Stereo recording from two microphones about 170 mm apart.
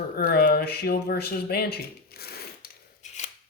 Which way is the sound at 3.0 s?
45° left (ahead or behind).